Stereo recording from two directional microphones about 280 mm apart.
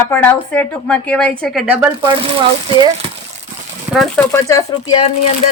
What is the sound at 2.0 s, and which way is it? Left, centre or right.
Speech, centre.